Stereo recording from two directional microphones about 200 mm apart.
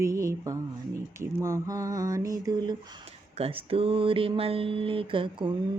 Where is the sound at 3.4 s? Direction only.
30° right (ahead or behind).